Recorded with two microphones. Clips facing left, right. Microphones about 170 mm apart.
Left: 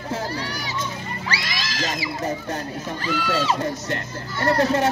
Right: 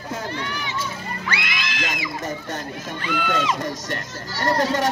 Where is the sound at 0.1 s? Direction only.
35° left (ahead or behind).